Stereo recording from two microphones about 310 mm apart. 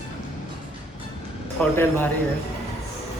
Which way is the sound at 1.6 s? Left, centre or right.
Centre.